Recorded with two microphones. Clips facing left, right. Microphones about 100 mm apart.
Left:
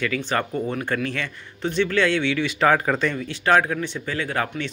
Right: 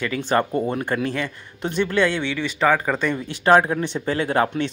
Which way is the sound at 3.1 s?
20° right (ahead or behind).